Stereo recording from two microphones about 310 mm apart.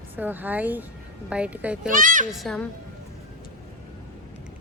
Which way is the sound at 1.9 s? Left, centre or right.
Right.